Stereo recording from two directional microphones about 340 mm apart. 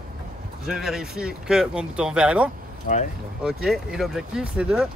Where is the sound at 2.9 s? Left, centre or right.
Left.